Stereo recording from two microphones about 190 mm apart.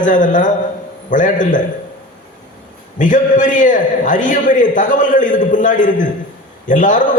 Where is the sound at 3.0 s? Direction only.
40° left (ahead or behind).